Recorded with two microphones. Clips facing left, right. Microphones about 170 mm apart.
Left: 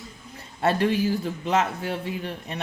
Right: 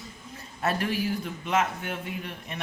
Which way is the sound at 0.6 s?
30° left (ahead or behind).